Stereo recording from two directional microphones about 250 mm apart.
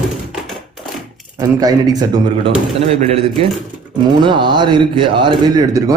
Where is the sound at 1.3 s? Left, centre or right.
Centre.